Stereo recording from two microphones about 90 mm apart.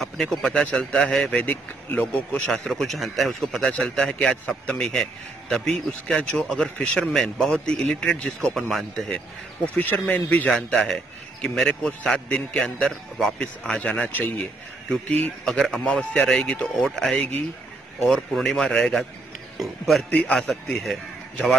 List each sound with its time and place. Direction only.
0.0 s a man's voice: 5° left (ahead or behind)
1.4 s a man's voice: 20° left (ahead or behind); by 9.2 s 5° left (ahead or behind)
9.8 s a man's voice: 20° left (ahead or behind)
20.1 s a man's voice: 15° left (ahead or behind)
20.3 s a man's voice: 5° left (ahead or behind)